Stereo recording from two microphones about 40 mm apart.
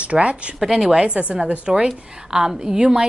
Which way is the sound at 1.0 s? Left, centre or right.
Right.